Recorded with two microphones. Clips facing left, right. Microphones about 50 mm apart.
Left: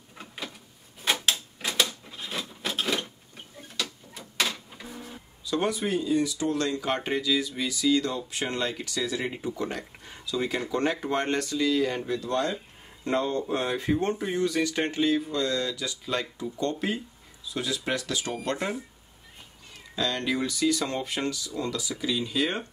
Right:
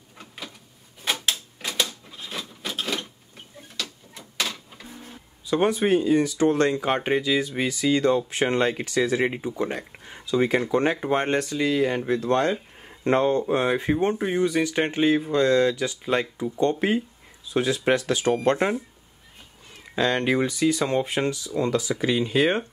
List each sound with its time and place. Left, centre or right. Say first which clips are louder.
1.2 s a sound: even; centre
5.4 s speech: right 6 dB; right
6.7 s speech: right 5 dB; right
10.2 s speech: right 7 dB; right
12.2 s speech: right 6 dB; right
20.0 s speech: right 6 dB; right